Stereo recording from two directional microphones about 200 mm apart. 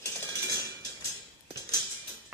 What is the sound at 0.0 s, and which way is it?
Dishes, 15° left (ahead or behind).